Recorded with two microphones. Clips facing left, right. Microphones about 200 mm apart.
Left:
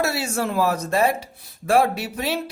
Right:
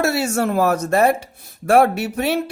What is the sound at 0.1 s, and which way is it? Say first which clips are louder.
Speech: right 5 dB; 50° right (ahead or behind).